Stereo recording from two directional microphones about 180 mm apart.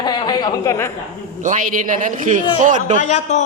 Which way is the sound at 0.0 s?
20° left (ahead or behind).